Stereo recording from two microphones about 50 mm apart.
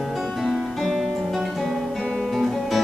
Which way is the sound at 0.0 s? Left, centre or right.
Centre.